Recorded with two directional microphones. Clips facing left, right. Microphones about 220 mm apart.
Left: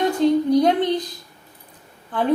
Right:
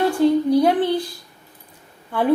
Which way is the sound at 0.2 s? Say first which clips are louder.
Even; 5° right (ahead or behind).